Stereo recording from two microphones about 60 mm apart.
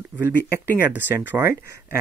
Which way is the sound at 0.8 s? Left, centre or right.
Right.